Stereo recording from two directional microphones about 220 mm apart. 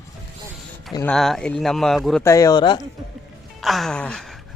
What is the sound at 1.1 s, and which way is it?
Speech, centre (ahead or behind).